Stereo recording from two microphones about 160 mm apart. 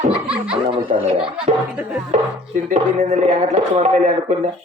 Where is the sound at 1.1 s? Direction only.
35° right (ahead or behind).